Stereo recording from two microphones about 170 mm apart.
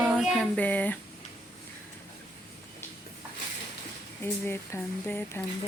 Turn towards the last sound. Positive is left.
turn(degrees=15)  # may be behind; listen again after turning